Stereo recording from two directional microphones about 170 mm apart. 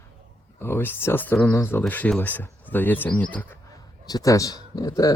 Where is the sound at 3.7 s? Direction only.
20° left (ahead or behind).